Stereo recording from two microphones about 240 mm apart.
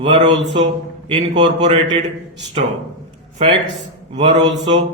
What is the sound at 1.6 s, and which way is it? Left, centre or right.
Speech, centre.